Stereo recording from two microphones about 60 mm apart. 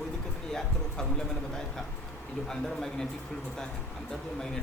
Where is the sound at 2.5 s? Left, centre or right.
Centre.